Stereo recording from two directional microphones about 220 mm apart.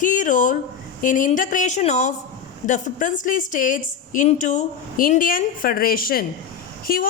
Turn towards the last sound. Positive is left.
turn(degrees=40)  # may be behind; listen again after turning